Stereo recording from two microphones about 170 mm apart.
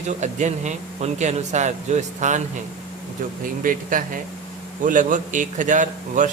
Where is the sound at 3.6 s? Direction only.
55° right (ahead or behind).